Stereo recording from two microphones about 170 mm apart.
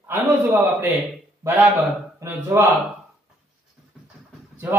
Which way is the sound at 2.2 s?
15° right (ahead or behind).